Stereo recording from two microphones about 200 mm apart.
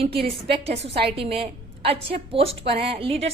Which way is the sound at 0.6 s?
30° right (ahead or behind).